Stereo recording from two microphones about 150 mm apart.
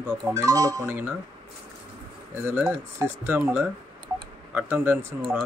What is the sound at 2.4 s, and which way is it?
Speech, 15° right (ahead or behind).